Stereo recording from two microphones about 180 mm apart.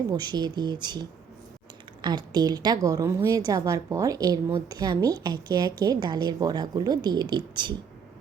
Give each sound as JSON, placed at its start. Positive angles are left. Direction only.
{"t": 0.1, "sound": "a woman's voice", "side_deg": -20}